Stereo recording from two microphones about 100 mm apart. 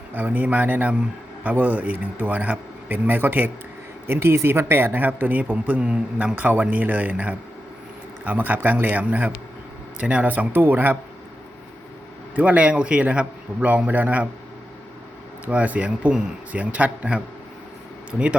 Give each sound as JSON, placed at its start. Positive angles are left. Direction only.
{"t": 0.1, "sound": "speech", "side_deg": -20}
{"t": 12.4, "sound": "speech", "side_deg": -15}
{"t": 15.4, "sound": "speech", "side_deg": -15}